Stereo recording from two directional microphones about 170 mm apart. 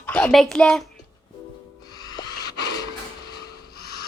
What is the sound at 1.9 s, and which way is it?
Music, 25° left (ahead or behind).